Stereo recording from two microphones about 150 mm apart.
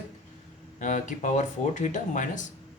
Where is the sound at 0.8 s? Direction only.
55° left (ahead or behind).